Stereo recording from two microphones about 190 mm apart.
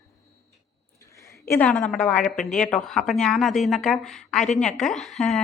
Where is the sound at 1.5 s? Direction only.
5° left (ahead or behind).